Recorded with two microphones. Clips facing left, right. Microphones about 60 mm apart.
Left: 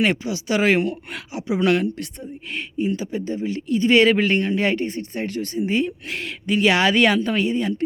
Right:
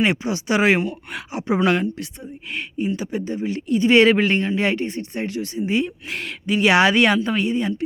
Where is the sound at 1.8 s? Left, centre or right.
Centre.